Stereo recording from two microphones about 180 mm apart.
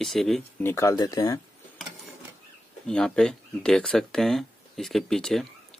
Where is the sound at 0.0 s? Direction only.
Centre (ahead or behind).